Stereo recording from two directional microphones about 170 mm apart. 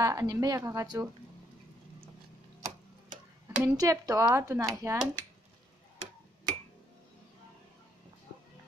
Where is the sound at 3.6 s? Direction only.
20° right (ahead or behind).